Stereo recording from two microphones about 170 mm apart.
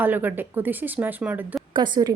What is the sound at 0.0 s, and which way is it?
Speech, 10° right (ahead or behind).